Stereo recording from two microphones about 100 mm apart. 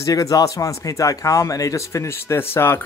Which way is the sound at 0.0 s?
35° left (ahead or behind).